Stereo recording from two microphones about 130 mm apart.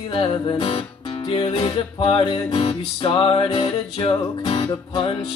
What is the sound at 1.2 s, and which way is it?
Music, 45° left (ahead or behind).